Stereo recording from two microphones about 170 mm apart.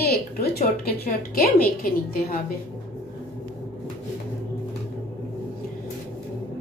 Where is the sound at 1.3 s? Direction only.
60° left (ahead or behind).